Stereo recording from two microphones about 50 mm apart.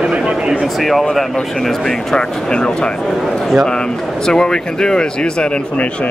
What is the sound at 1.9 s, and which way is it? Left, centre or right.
Speech, centre.